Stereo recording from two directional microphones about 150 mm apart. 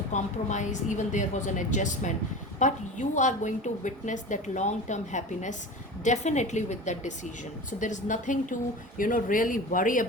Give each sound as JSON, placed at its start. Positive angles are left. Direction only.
{"t": 0.1, "sound": "a woman's voice", "side_deg": 55}